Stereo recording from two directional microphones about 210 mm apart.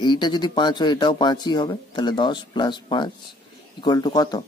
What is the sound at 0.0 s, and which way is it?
Speech, 20° left (ahead or behind).